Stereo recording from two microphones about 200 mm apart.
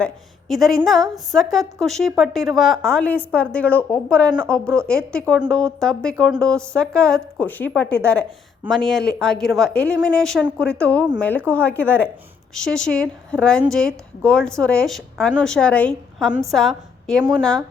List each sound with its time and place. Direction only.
0.0 s a woman's voice: centre (ahead or behind)